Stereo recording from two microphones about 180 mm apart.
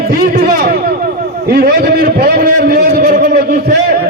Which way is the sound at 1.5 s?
60° right (ahead or behind).